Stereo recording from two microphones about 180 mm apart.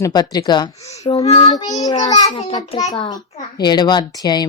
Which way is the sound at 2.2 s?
30° left (ahead or behind).